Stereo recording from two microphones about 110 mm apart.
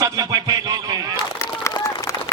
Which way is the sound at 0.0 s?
35° right (ahead or behind).